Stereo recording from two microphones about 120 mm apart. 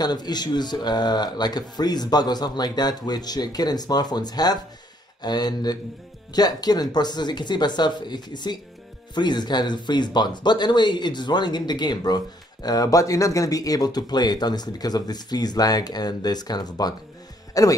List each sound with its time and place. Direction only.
0.0 s speech: 35° left (ahead or behind)